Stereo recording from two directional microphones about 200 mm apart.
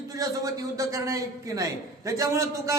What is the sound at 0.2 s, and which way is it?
A man's voice, 15° right (ahead or behind).